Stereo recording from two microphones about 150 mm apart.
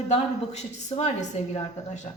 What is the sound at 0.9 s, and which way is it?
Speech, 50° left (ahead or behind).